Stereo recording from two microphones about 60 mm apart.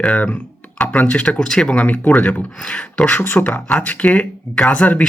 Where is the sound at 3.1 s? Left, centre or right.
Left.